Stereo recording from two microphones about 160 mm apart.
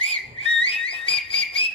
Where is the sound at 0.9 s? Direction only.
35° left (ahead or behind).